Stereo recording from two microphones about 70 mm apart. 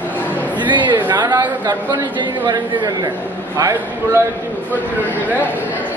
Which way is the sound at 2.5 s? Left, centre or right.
Right.